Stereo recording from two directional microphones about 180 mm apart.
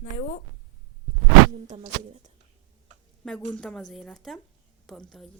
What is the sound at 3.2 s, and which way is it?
Speech, 5° left (ahead or behind).